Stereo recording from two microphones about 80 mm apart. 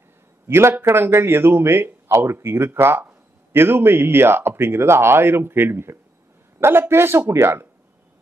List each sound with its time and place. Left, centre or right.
0.5 s a man's voice: right